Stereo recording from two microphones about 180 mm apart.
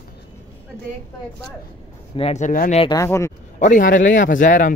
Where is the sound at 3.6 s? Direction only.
45° left (ahead or behind).